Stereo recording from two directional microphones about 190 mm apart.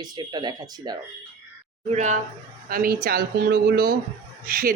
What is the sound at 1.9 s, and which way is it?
Speech, 40° right (ahead or behind).